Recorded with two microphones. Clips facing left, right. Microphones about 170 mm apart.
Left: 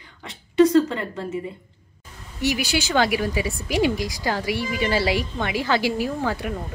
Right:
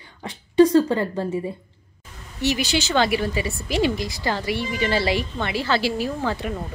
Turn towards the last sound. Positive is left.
turn(degrees=5)  # may be behind; listen again after turning